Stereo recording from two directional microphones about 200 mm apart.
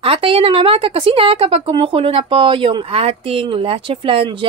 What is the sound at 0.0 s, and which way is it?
Speech, 30° right (ahead or behind).